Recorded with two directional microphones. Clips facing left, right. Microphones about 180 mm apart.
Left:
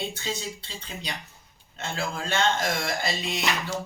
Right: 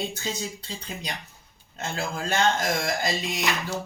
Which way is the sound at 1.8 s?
40° right (ahead or behind).